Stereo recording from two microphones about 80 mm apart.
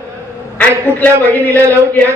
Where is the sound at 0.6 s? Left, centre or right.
Left.